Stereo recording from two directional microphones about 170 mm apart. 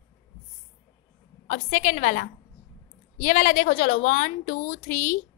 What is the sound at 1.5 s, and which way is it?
A woman's voice, 40° left (ahead or behind).